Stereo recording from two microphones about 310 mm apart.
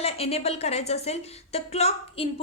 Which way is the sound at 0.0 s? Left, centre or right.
Centre.